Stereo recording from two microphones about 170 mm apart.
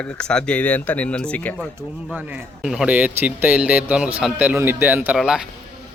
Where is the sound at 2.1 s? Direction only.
5° right (ahead or behind).